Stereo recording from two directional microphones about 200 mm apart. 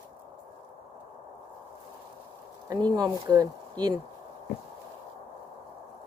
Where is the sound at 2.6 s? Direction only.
20° right (ahead or behind).